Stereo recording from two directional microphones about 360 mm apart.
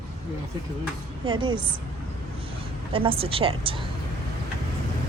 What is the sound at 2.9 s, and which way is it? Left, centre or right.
Speech, centre.